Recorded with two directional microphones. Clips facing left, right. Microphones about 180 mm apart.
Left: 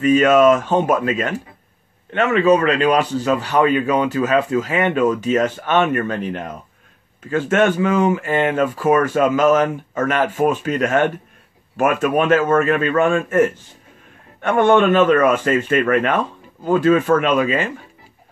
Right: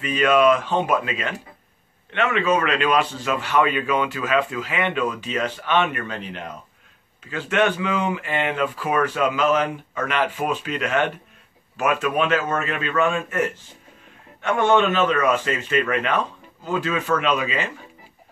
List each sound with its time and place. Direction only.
0.0 s a man's voice: 45° left (ahead or behind)